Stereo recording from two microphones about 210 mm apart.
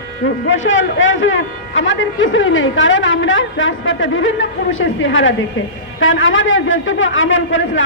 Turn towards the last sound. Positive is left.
turn(degrees=65)  # may be behind; listen again after turning